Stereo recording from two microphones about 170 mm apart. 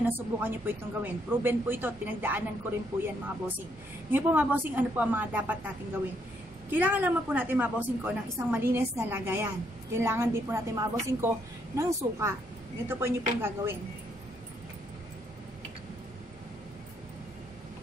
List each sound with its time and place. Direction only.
0.4 s speech: 10° right (ahead or behind)
6.7 s speech: 10° right (ahead or behind)